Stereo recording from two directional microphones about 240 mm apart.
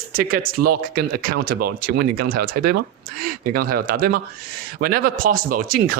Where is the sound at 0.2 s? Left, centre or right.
Right.